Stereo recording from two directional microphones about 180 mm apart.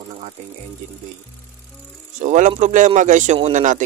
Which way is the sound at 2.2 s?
45° right (ahead or behind).